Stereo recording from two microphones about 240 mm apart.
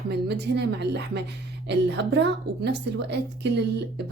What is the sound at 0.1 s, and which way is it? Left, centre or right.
A woman's voice, right.